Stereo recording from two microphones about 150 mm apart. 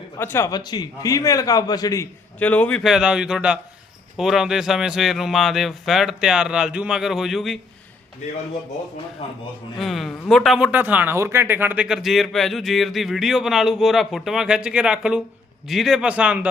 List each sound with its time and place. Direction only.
0.2 s a man's voice: 15° left (ahead or behind)
2.4 s speech: 10° left (ahead or behind)
9.2 s a man's voice: 40° left (ahead or behind)
9.7 s speech: centre (ahead or behind)